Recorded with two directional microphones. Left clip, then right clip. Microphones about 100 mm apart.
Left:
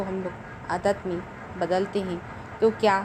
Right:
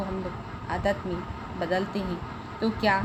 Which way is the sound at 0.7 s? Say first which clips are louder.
Left 3 dB; 30° left (ahead or behind).